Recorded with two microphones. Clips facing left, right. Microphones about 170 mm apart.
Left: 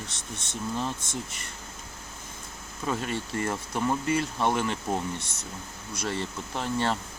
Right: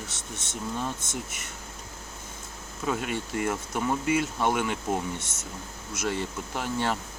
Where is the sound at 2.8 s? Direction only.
5° right (ahead or behind).